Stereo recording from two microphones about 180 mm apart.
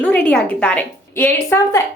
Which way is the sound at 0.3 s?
5° left (ahead or behind).